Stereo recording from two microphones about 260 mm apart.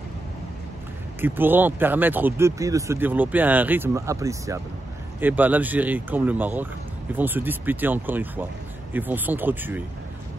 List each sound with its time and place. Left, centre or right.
1.2 s speech: centre